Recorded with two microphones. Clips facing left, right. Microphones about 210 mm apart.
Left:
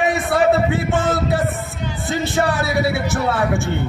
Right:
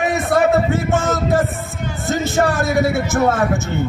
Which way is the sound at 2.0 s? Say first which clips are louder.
Right 2 dB; 45° right (ahead or behind).